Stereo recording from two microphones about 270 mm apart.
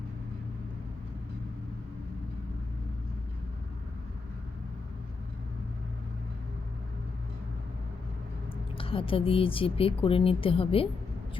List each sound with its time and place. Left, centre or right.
8.8 s speech: centre